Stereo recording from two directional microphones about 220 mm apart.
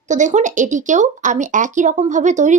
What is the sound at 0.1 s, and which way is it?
Speech, 35° right (ahead or behind).